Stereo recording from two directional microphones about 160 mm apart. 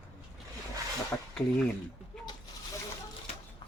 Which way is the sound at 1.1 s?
10° left (ahead or behind).